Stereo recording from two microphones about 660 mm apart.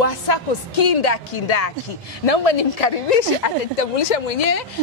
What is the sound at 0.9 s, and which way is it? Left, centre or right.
A woman's voice, left.